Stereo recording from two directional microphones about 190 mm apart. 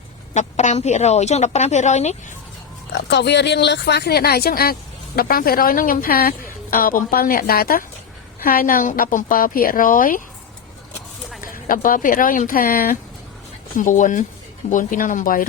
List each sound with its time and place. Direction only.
0.3 s a woman's voice: 40° left (ahead or behind)
3.1 s speech: 65° left (ahead or behind); by 10.2 s 45° left (ahead or behind)
11.3 s speech: 45° left (ahead or behind)